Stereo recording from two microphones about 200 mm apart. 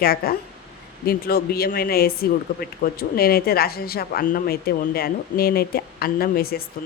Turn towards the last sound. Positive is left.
turn(degrees=50)  # may be behind; listen again after turning